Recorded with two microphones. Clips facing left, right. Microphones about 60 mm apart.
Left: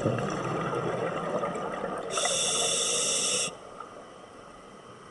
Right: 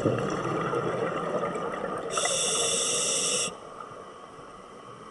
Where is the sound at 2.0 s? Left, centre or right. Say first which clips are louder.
Right 1 dB; right.